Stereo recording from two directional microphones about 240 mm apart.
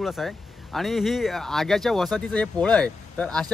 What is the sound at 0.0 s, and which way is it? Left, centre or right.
Speech, centre.